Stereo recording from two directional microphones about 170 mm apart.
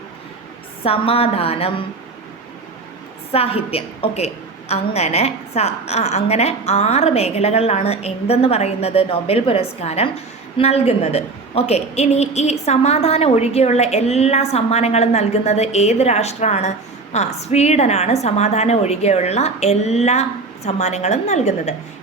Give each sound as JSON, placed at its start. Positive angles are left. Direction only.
{"t": 0.8, "sound": "a woman's voice", "side_deg": 35}
{"t": 3.3, "sound": "a woman's voice", "side_deg": 35}